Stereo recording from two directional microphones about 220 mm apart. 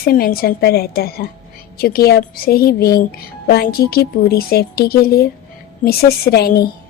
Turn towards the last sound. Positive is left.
turn(degrees=45)  # may be behind; listen again after turning